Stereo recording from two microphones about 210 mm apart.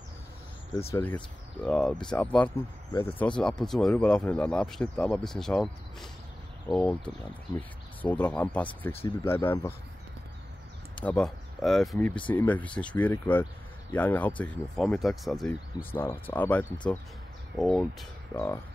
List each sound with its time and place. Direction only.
0.9 s speech: 5° left (ahead or behind)
8.0 s speech: 10° left (ahead or behind)
11.0 s speech: 5° left (ahead or behind)